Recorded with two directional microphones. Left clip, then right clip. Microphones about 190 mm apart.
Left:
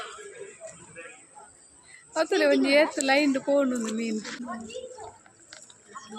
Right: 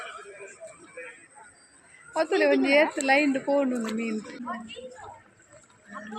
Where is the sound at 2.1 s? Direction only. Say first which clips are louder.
Even; 10° right (ahead or behind).